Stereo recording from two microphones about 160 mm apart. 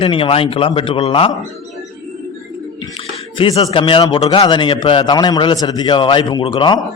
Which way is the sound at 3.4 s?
40° left (ahead or behind).